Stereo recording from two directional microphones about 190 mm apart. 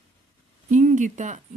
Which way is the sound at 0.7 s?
40° right (ahead or behind).